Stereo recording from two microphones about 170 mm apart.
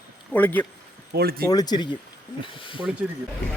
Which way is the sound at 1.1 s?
65° right (ahead or behind).